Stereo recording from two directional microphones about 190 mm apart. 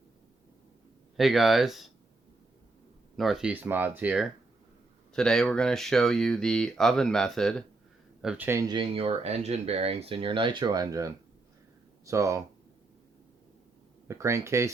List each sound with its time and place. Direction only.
1.1 s speech: centre (ahead or behind)
3.2 s speech: centre (ahead or behind)
14.1 s speech: 15° right (ahead or behind)